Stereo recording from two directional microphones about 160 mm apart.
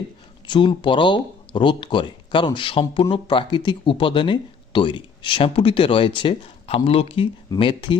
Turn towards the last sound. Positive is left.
turn(degrees=30)  # may be behind; listen again after turning